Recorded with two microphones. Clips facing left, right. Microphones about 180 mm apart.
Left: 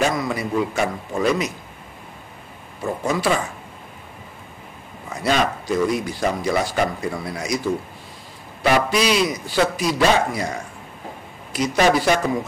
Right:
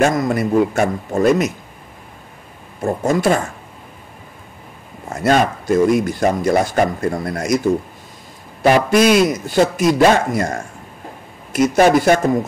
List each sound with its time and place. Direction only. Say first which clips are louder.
0.0 s speech: right 6 dB; 50° right (ahead or behind)
2.8 s speech: right 5 dB; 45° right (ahead or behind)
5.1 s speech: right 5 dB; 50° right (ahead or behind)
8.9 s speech: right 7 dB; 50° right (ahead or behind)